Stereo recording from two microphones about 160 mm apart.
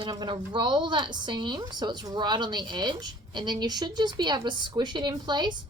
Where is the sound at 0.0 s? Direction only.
25° right (ahead or behind).